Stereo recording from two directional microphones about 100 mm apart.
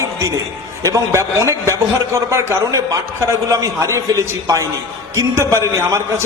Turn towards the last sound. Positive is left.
turn(degrees=-30)  # may be behind; listen again after turning